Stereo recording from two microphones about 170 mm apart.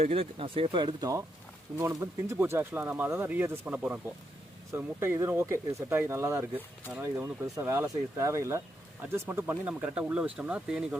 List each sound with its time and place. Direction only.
0.0 s speech: 35° right (ahead or behind); by 10.8 s 5° right (ahead or behind)